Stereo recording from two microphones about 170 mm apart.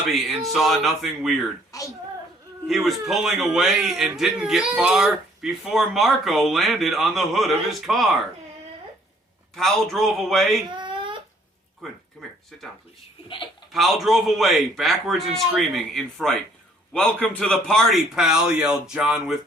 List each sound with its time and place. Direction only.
0.1 s speech: centre (ahead or behind)
1.7 s a sound: 20° left (ahead or behind)
2.8 s speech: centre (ahead or behind)
9.6 s speech: centre (ahead or behind)
10.7 s a sound: 30° right (ahead or behind)
12.5 s speech: centre (ahead or behind)
13.2 s speech: 30° left (ahead or behind)
13.7 s speech: centre (ahead or behind)